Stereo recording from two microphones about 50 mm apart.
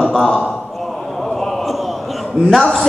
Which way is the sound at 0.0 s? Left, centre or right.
Centre.